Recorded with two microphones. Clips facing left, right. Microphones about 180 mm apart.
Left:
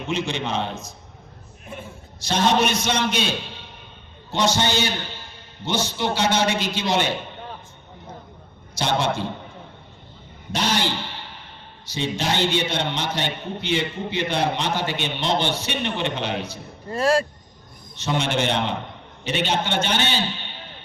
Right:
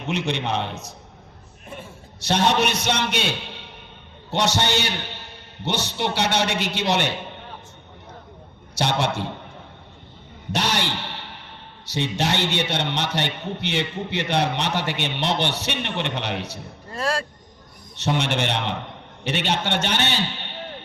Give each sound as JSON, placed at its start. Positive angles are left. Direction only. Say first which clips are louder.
{"t": 0.1, "sound": "a man's voice", "louder": "right 1 dB", "side_deg": -65}
{"t": 2.2, "sound": "a man's voice", "louder": "even", "side_deg": -65}
{"t": 8.8, "sound": "a man's voice", "louder": "even", "side_deg": -65}
{"t": 10.5, "sound": "a sound", "louder": "left 1 dB", "side_deg": -70}
{"t": 11.9, "sound": "a man's voice", "louder": "right 1 dB", "side_deg": -70}
{"t": 17.0, "sound": "speech", "louder": "left 6 dB", "side_deg": 25}
{"t": 17.9, "sound": "a man's voice", "louder": "even", "side_deg": -70}